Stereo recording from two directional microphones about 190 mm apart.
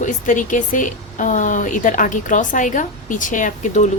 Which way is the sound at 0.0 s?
40° left (ahead or behind).